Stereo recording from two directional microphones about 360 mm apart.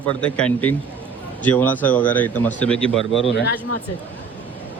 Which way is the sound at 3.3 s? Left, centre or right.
Left.